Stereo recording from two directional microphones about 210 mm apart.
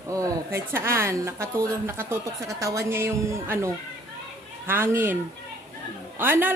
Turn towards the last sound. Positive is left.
turn(degrees=-10)  # may be behind; listen again after turning